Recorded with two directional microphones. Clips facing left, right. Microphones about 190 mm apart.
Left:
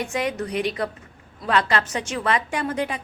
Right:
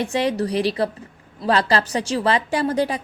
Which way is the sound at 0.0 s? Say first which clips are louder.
Right 5 dB; 30° right (ahead or behind).